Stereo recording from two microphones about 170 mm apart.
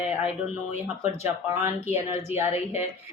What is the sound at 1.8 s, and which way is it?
Speech, 40° left (ahead or behind).